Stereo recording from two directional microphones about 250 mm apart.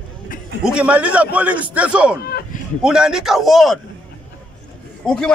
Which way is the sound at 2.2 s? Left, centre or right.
Left.